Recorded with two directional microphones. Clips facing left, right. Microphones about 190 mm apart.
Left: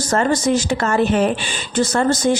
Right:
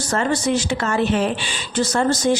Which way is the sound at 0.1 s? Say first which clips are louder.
Left 3 dB; 45° left (ahead or behind).